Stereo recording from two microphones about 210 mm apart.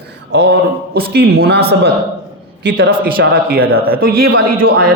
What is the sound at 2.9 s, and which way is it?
A man's voice, 45° right (ahead or behind).